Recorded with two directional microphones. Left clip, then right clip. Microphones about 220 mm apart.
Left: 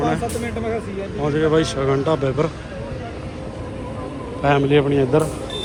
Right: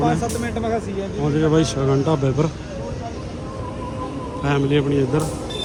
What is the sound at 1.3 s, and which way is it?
A man's voice, 20° right (ahead or behind).